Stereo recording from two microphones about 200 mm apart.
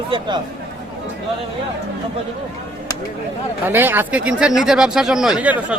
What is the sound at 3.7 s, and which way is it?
Speech, 10° right (ahead or behind).